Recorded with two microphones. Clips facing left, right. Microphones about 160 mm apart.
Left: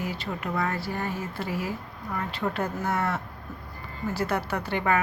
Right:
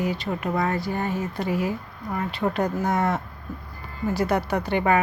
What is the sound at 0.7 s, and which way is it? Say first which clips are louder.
Speech: right 5 dB; 20° right (ahead or behind).